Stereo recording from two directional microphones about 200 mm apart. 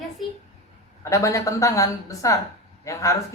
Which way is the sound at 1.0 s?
15° left (ahead or behind).